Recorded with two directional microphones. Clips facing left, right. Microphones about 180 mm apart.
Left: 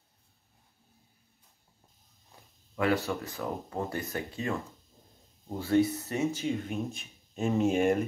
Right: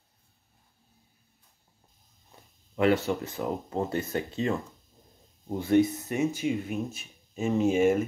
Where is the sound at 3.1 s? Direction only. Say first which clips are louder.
Right 4 dB; 20° right (ahead or behind); by 8.1 s centre (ahead or behind).